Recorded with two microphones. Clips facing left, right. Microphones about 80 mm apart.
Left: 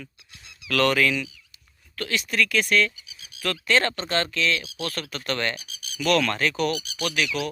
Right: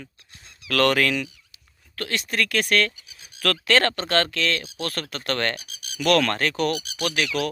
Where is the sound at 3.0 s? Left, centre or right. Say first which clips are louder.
Left 1 dB; right.